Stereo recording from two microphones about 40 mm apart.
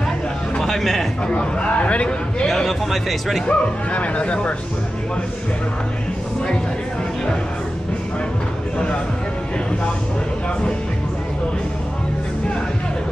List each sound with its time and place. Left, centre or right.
0.6 s a sound: centre
1.3 s a man's voice: left
2.4 s speech: centre
3.4 s speech: left